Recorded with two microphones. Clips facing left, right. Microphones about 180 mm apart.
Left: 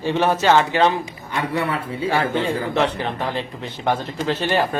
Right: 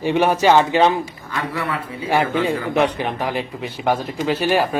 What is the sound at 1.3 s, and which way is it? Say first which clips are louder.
Speech: left 2 dB; 25° left (ahead or behind).